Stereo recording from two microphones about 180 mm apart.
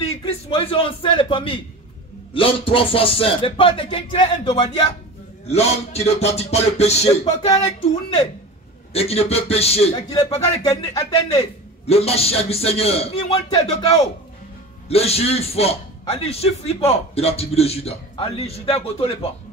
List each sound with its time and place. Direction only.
0.2 s a man's voice: 30° left (ahead or behind)